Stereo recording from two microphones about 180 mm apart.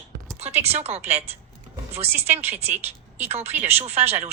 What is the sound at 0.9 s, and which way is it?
Speech, 35° right (ahead or behind).